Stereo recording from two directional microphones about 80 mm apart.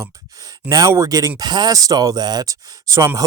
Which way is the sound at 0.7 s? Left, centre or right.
Right.